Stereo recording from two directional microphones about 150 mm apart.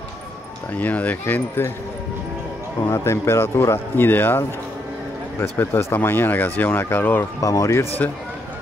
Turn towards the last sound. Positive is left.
turn(degrees=20)  # may be behind; listen again after turning